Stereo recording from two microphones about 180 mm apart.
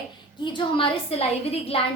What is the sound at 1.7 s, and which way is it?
Speech, 30° left (ahead or behind).